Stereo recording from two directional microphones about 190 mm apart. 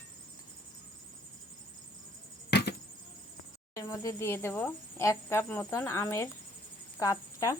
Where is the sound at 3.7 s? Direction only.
15° left (ahead or behind).